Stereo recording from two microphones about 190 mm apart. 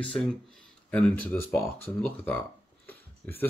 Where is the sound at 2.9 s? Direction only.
10° left (ahead or behind).